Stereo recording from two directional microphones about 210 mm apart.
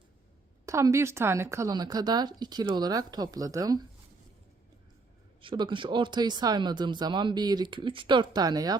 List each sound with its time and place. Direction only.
0.6 s a woman's voice: 15° right (ahead or behind)
5.4 s speech: 25° right (ahead or behind)